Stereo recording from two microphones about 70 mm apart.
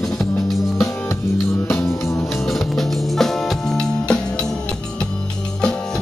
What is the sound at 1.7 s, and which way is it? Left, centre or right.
Music, left.